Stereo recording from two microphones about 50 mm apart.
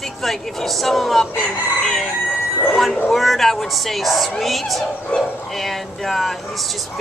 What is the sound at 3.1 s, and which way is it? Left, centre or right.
Speech, centre.